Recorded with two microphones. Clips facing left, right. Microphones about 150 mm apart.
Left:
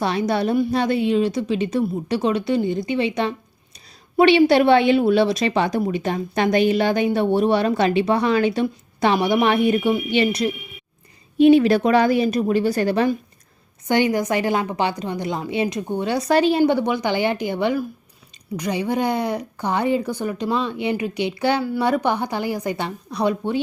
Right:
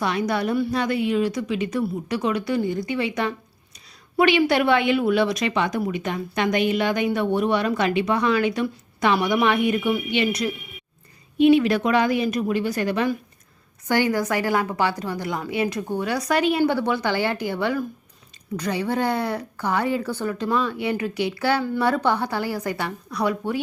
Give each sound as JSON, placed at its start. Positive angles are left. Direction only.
{"t": 0.0, "sound": "a woman's voice", "side_deg": 30}
{"t": 13.8, "sound": "a woman's voice", "side_deg": 20}
{"t": 16.7, "sound": "a woman's voice", "side_deg": 15}